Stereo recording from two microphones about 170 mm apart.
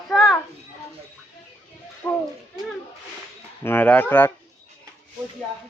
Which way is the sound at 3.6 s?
10° left (ahead or behind).